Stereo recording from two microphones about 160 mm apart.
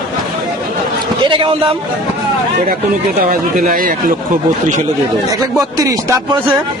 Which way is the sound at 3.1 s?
65° right (ahead or behind).